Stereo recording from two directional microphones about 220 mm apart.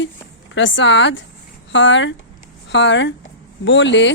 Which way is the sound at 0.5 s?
55° left (ahead or behind).